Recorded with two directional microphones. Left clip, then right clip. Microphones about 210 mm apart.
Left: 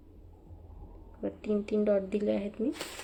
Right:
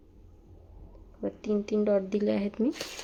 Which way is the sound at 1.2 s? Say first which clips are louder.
Right 2 dB; 10° right (ahead or behind).